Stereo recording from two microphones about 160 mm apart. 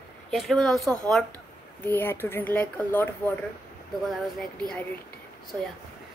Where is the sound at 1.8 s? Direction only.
15° left (ahead or behind).